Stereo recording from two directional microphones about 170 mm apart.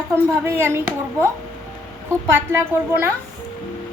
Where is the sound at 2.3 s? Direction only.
15° right (ahead or behind).